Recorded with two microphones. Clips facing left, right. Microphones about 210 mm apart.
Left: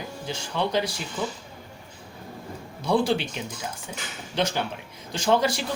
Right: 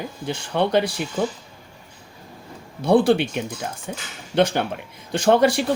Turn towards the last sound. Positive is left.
turn(degrees=-55)  # may be behind; listen again after turning